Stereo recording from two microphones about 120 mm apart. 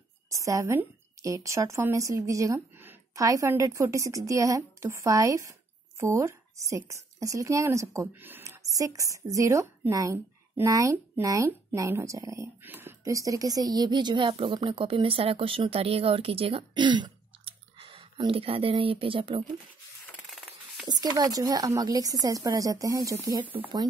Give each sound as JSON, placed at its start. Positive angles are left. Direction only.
{"t": 0.3, "sound": "a woman's voice", "side_deg": -25}
{"t": 20.8, "sound": "a woman's voice", "side_deg": -35}